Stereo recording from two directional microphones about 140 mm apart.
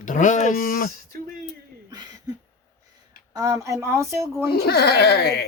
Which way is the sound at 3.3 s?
20° right (ahead or behind).